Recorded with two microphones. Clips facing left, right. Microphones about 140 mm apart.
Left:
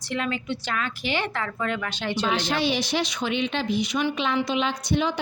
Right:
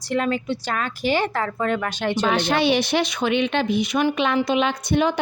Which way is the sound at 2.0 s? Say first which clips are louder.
Right 4 dB; 50° right (ahead or behind).